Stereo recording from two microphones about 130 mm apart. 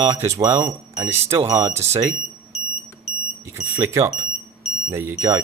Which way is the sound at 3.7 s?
25° right (ahead or behind).